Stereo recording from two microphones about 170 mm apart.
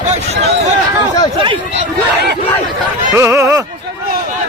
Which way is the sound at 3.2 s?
15° right (ahead or behind).